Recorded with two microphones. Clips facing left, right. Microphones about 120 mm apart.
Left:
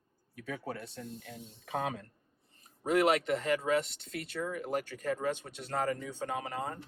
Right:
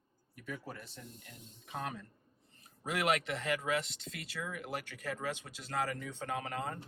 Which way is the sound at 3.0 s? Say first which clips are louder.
Left 2 dB; 35° left (ahead or behind).